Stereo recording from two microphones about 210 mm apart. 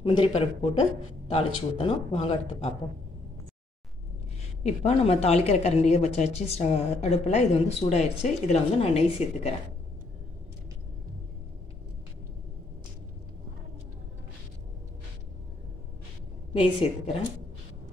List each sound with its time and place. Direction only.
0.0 s speech: 25° left (ahead or behind)
4.6 s speech: 30° left (ahead or behind)